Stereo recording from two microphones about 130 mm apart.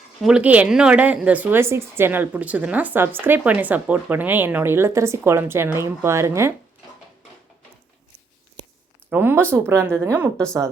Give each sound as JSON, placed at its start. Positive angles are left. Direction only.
{"t": 0.2, "sound": "speech", "side_deg": -5}
{"t": 9.0, "sound": "speech", "side_deg": -15}